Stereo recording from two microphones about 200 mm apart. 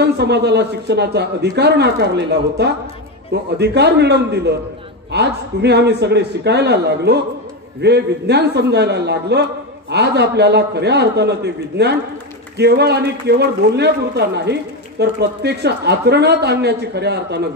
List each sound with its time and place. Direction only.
0.0 s a man's voice: 55° right (ahead or behind)